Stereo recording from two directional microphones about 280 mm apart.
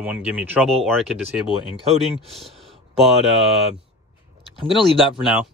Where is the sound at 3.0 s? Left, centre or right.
Centre.